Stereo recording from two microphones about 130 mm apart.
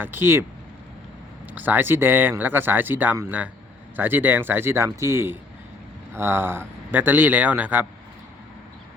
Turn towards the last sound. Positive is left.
turn(degrees=-15)  # may be behind; listen again after turning